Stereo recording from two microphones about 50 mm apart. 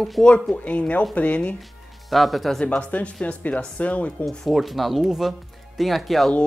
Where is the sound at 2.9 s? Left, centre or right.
Left.